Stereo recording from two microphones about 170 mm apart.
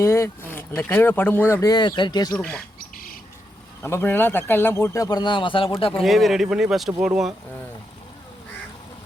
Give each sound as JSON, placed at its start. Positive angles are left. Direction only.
{"t": 0.0, "sound": "speech", "side_deg": 15}
{"t": 2.9, "sound": "bird", "side_deg": 55}
{"t": 3.8, "sound": "speech", "side_deg": 15}
{"t": 5.9, "sound": "speech", "side_deg": 0}